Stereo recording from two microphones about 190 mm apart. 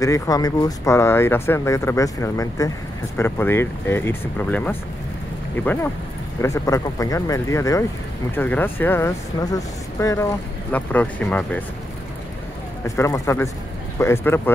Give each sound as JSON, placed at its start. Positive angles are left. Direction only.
{"t": 0.0, "sound": "speech", "side_deg": 20}
{"t": 12.8, "sound": "speech", "side_deg": 15}